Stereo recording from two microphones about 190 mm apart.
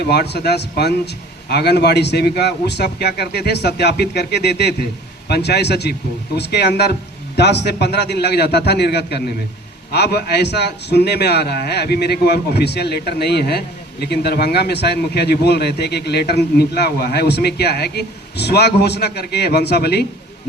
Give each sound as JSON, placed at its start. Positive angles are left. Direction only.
{"t": 0.0, "sound": "a man's voice", "side_deg": 60}